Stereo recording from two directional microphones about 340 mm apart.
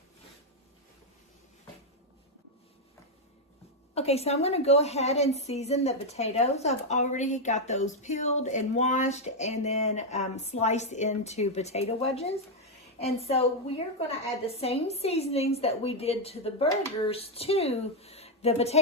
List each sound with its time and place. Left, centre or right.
3.9 s a woman's voice: centre